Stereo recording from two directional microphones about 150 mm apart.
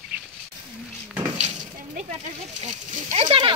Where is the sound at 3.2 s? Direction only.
35° right (ahead or behind).